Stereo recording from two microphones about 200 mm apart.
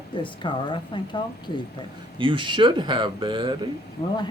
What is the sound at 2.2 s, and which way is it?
Speech, 25° right (ahead or behind).